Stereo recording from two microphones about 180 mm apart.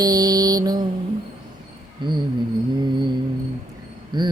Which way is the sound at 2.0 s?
25° right (ahead or behind).